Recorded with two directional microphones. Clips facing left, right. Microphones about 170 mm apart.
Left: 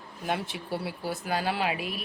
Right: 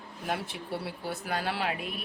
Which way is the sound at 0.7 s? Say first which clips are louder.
Left 3 dB; 5° left (ahead or behind).